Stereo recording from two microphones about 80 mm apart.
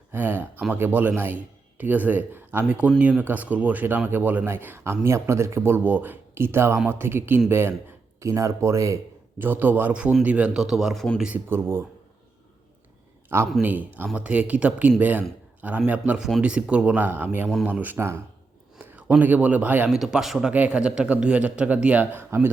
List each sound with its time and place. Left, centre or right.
0.1 s speech: right
2.6 s speech: centre; by 9.0 s right
9.4 s speech: right
10.6 s speech: centre
11.2 s speech: centre
11.4 s speech: right
13.2 s a man's voice: right
18.8 s a sound: right
19.2 s speech: centre
19.9 s speech: centre
20.5 s speech: centre
22.1 s speech: right